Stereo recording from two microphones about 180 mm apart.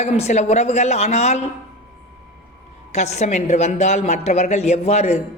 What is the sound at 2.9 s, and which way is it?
A man's voice, 40° left (ahead or behind).